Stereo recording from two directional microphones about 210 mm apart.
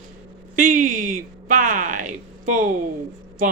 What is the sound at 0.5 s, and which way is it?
Speech, 40° right (ahead or behind).